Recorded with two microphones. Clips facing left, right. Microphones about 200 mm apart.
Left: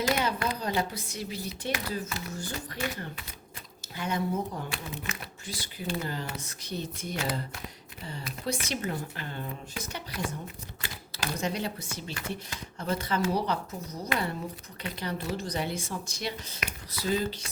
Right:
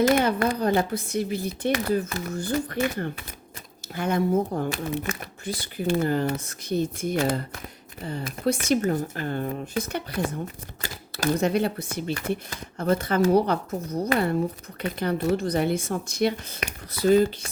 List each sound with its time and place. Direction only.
0.0 s a woman's voice: 50° right (ahead or behind)